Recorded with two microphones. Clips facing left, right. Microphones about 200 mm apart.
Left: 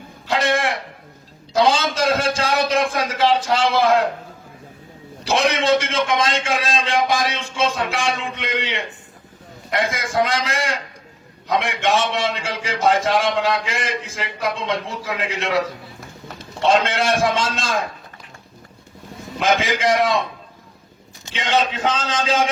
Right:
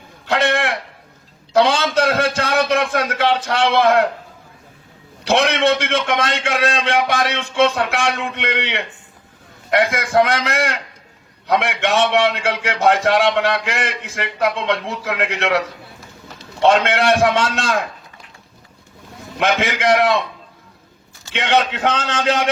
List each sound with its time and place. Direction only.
0.4 s a sound: 65° right (ahead or behind)
5.2 s a man's voice: 65° right (ahead or behind)
16.6 s a man's voice: 65° right (ahead or behind)
19.4 s a man's voice: 65° right (ahead or behind)
21.3 s a man's voice: 65° right (ahead or behind)